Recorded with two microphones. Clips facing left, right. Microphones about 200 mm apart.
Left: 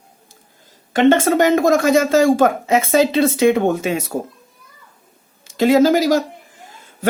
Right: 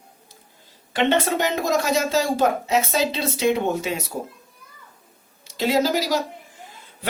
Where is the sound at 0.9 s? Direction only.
45° left (ahead or behind).